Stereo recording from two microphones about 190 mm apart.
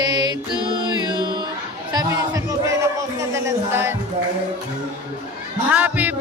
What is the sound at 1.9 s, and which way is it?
Speech, 20° right (ahead or behind).